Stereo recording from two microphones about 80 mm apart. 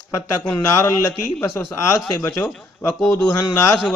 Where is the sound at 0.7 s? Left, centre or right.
Left.